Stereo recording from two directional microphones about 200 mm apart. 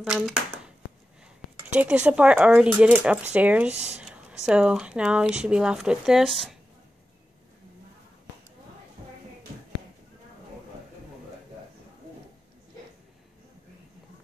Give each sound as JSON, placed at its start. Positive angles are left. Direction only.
{"t": 0.0, "sound": "speech", "side_deg": -5}
{"t": 1.7, "sound": "speech", "side_deg": -5}
{"t": 3.7, "sound": "speech", "side_deg": -35}
{"t": 4.0, "sound": "a sound", "side_deg": -5}
{"t": 4.5, "sound": "speech", "side_deg": -5}